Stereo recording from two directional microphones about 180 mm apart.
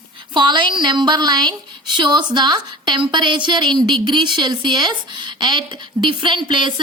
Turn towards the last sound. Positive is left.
turn(degrees=-25)  # may be behind; listen again after turning